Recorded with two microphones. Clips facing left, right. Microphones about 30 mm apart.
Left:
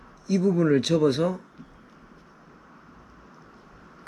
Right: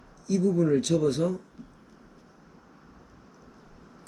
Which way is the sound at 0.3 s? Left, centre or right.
Left.